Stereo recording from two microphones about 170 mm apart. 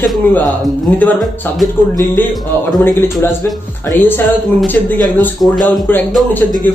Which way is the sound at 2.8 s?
15° left (ahead or behind).